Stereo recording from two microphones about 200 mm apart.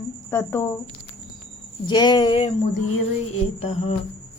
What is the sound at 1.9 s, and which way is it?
Speech, 20° left (ahead or behind).